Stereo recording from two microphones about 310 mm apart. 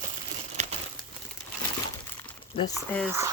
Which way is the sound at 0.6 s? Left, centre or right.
Right.